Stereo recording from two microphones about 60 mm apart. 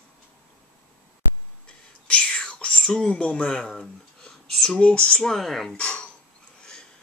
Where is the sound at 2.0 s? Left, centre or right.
Centre.